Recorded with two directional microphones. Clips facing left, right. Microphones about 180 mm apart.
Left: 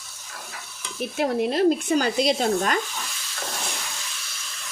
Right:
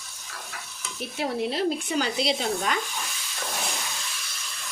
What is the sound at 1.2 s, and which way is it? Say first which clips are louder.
Speech: left 6 dB; 50° left (ahead or behind).